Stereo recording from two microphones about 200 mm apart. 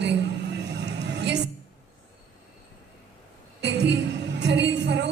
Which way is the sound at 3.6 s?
60° right (ahead or behind).